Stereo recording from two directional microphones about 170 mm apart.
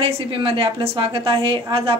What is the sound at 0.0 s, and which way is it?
A woman's voice, 30° right (ahead or behind).